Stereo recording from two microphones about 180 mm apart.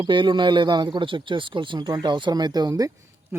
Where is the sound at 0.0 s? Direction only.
25° right (ahead or behind).